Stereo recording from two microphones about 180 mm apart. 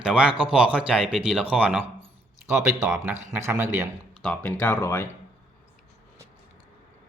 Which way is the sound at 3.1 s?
40° right (ahead or behind).